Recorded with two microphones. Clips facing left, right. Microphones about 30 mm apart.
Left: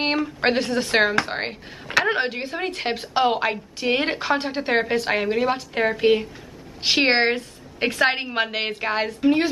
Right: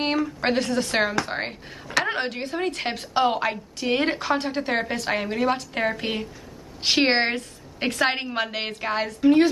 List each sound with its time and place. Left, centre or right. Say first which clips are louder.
0.0 s a woman's voice: left 2 dB; left